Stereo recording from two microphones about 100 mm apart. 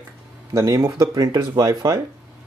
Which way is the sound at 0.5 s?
35° right (ahead or behind).